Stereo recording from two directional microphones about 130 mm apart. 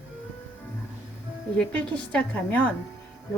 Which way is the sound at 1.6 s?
10° left (ahead or behind).